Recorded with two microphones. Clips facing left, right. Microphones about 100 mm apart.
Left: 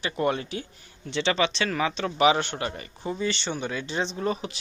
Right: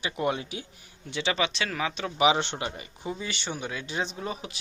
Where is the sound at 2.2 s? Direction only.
20° right (ahead or behind).